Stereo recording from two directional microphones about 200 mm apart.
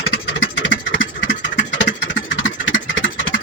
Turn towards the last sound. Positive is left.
turn(degrees=65)  # may be behind; listen again after turning